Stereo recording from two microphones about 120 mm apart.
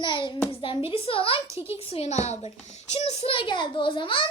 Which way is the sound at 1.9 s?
65° left (ahead or behind).